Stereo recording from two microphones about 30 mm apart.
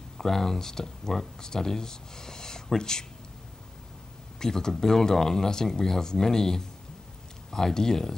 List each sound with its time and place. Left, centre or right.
0.2 s speech: centre
4.4 s speech: left